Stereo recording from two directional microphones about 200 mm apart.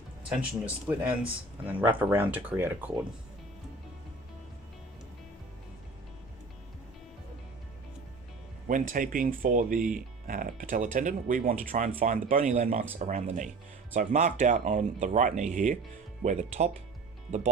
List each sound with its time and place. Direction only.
0.3 s speech: 5° right (ahead or behind)
8.6 s speech: 40° right (ahead or behind)